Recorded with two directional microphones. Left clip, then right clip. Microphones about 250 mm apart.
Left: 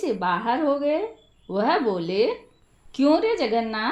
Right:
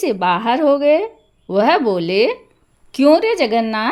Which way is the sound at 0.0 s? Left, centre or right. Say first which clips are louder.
Right 7 dB; right.